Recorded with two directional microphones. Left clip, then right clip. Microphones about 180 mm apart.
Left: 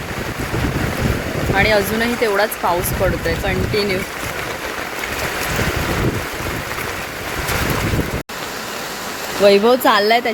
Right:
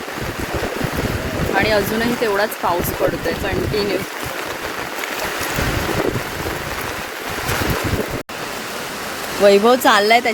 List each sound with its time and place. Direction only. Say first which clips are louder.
1.5 s speech: left 2 dB; 5° right (ahead or behind)
9.4 s speech: even; 5° right (ahead or behind)